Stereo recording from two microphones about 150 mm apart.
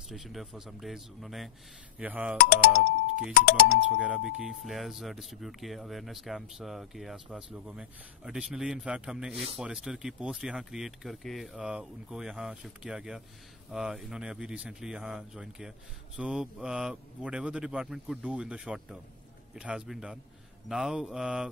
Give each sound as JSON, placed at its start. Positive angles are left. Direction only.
{"t": 0.1, "sound": "speech", "side_deg": 0}
{"t": 2.3, "sound": "speech", "side_deg": 75}
{"t": 4.0, "sound": "speech", "side_deg": -10}